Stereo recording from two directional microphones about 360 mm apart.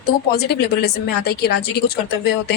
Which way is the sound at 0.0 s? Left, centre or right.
Left.